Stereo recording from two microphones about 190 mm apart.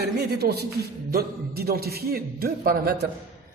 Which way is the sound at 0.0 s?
55° right (ahead or behind).